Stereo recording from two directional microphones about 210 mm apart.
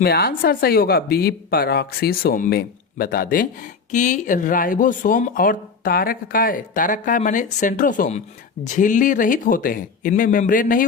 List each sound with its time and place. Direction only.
0.0 s speech: 45° left (ahead or behind)